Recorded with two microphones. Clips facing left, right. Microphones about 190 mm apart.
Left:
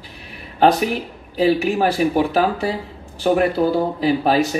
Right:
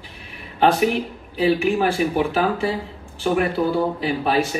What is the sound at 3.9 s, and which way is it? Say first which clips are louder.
Speech: left 4 dB; 40° left (ahead or behind).